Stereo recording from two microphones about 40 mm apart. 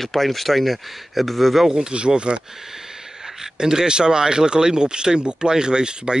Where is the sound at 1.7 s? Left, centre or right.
Centre.